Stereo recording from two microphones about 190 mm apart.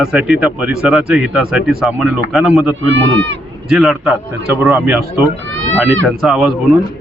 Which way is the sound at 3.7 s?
Centre (ahead or behind).